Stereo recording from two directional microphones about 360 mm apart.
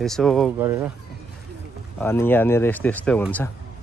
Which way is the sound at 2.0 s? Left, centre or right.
Centre.